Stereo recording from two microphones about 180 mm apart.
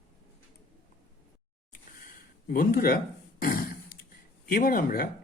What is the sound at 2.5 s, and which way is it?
Speech, 50° left (ahead or behind).